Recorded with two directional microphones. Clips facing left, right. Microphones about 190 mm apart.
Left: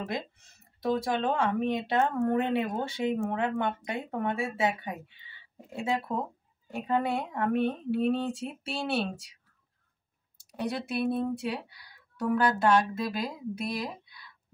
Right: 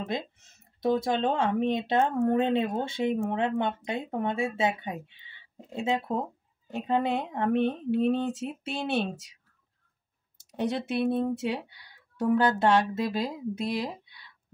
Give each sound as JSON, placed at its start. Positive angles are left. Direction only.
{"t": 0.7, "sound": "speech", "side_deg": -25}
{"t": 10.3, "sound": "speech", "side_deg": -25}